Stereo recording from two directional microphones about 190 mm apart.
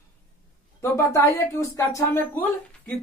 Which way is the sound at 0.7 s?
15° left (ahead or behind).